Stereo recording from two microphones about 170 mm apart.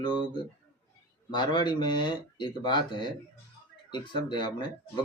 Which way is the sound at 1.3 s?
25° left (ahead or behind).